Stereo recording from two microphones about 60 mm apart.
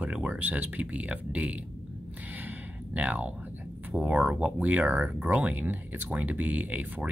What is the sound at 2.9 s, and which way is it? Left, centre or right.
Speech, right.